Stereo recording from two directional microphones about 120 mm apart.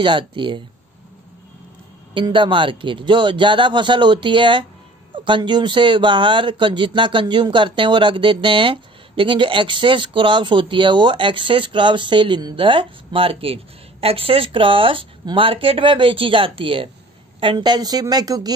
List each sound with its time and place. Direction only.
0.0 s speech: 45° right (ahead or behind)
2.1 s speech: 45° right (ahead or behind)